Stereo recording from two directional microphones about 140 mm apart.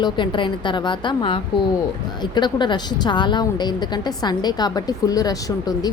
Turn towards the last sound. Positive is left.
turn(degrees=25)  # may be behind; listen again after turning